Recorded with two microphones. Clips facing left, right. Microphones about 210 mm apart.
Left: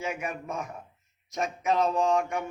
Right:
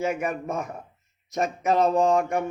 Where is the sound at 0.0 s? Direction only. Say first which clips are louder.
Right 7 dB; 45° right (ahead or behind).